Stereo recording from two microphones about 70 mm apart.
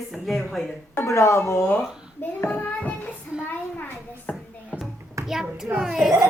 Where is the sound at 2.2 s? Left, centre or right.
Left.